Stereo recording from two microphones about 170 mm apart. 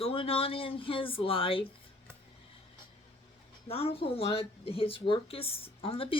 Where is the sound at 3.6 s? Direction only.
35° left (ahead or behind).